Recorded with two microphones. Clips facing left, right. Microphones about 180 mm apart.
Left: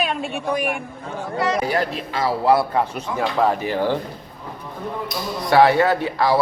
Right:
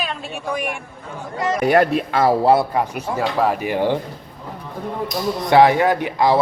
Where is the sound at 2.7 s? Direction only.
10° right (ahead or behind).